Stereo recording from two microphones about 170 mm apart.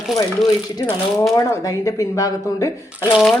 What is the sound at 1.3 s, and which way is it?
Speech, 20° left (ahead or behind).